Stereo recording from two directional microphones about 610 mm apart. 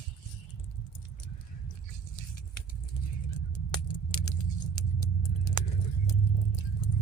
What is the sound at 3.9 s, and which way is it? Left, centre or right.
Vehicle, left.